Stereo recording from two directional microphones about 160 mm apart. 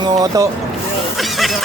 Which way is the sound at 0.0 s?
20° right (ahead or behind).